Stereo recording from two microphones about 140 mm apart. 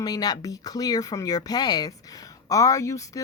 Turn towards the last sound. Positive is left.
turn(degrees=20)  # may be behind; listen again after turning